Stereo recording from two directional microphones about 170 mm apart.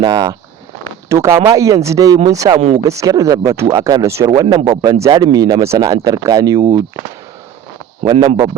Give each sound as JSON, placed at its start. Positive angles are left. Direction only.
{"t": 0.0, "sound": "speech", "side_deg": -20}
{"t": 2.6, "sound": "speech", "side_deg": -40}
{"t": 2.8, "sound": "speech", "side_deg": -20}
{"t": 8.0, "sound": "speech", "side_deg": -30}